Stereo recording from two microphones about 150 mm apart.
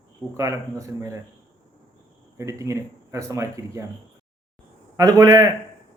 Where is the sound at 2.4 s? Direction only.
20° right (ahead or behind).